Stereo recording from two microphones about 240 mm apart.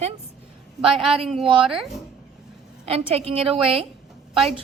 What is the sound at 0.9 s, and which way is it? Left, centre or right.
Speech, centre.